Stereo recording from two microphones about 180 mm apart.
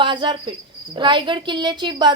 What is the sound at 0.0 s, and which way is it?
Speech, 25° right (ahead or behind).